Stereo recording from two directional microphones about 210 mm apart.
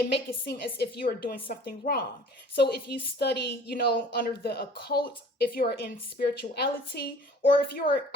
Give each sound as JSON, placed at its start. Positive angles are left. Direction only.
{"t": 0.1, "sound": "a woman's voice", "side_deg": 50}